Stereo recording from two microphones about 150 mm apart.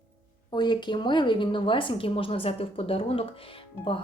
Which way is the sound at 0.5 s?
30° left (ahead or behind).